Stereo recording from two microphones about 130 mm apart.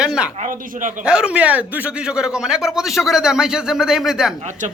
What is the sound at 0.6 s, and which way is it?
Speech, 90° right.